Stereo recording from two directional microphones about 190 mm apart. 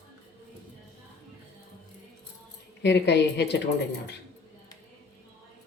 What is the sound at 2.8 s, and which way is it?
Speech, 60° left (ahead or behind).